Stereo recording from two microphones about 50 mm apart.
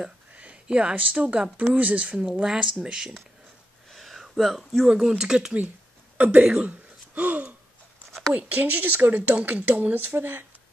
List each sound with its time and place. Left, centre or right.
0.4 s a sound: right
0.9 s speech: right
2.4 s speech: centre
3.9 s speech: centre
6.1 s speech: right